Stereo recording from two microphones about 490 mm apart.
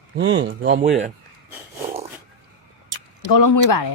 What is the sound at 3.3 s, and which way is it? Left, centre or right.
Speech, left.